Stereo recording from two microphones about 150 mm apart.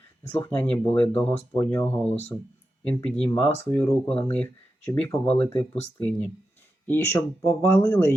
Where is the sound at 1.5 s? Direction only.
15° left (ahead or behind).